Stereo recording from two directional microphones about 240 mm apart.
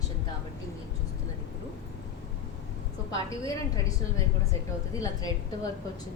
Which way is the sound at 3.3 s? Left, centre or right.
Centre.